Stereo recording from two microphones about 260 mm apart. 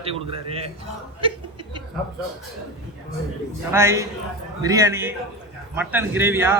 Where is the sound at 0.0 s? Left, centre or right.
Right.